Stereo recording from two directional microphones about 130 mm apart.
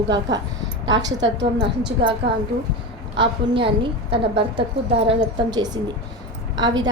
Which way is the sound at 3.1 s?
40° right (ahead or behind).